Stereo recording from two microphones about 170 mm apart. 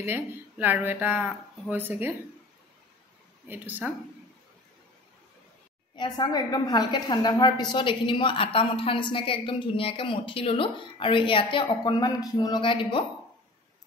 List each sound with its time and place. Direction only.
0.0 s speech: 10° right (ahead or behind)
3.4 s speech: 10° right (ahead or behind)
5.9 s a woman's voice: 25° left (ahead or behind)